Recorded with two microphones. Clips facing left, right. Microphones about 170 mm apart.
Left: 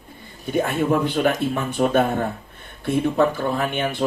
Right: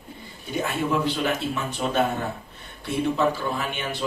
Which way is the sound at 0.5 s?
50° left (ahead or behind).